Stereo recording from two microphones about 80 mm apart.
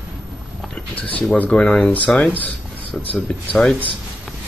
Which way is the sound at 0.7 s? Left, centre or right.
Centre.